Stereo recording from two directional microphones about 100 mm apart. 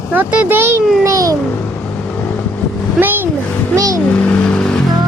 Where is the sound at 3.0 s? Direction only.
20° right (ahead or behind).